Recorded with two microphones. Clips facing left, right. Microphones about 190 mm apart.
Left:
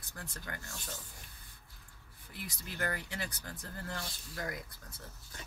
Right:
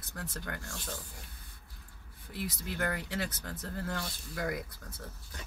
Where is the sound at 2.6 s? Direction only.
55° right (ahead or behind).